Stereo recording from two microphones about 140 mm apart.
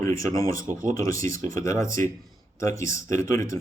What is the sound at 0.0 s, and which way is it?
Speech, 20° left (ahead or behind).